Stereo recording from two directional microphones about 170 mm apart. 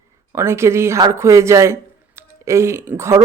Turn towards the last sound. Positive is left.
turn(degrees=-15)  # may be behind; listen again after turning